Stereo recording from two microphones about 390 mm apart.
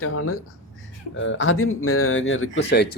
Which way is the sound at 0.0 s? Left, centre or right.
Left.